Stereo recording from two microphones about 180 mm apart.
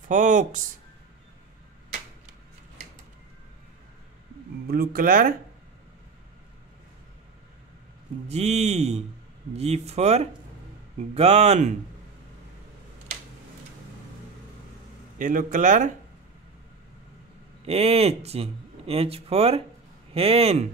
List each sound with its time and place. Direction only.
0.1 s a man's voice: 45° right (ahead or behind)
4.6 s a man's voice: 55° right (ahead or behind)
8.3 s speech: 35° right (ahead or behind)
15.1 s a man's voice: 50° right (ahead or behind)
17.6 s speech: 35° right (ahead or behind)